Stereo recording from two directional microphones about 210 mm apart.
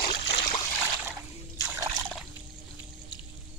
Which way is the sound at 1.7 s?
15° right (ahead or behind).